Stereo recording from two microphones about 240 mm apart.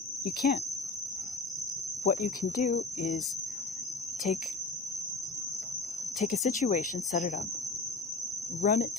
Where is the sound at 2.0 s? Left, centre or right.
Left.